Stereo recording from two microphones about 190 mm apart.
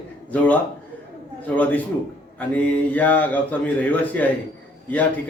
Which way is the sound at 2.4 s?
10° left (ahead or behind).